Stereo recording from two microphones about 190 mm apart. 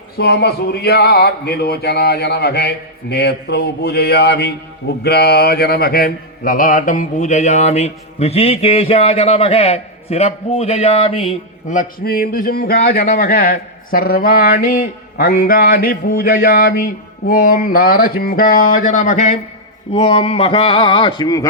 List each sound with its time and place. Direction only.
0.2 s speech: 55° left (ahead or behind)
5.0 s mantra: 55° left (ahead or behind); by 11.0 s 35° left (ahead or behind)
11.3 s a man's voice: 45° left (ahead or behind); by 21.4 s 20° left (ahead or behind)